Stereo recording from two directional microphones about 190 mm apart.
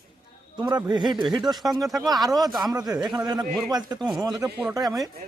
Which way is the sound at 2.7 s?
20° right (ahead or behind).